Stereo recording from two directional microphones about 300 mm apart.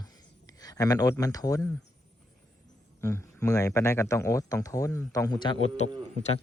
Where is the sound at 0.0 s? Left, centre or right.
Centre.